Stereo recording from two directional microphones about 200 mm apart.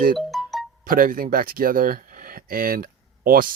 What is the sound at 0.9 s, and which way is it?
Speech, 45° right (ahead or behind).